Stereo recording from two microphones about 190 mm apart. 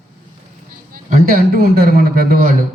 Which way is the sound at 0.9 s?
50° right (ahead or behind).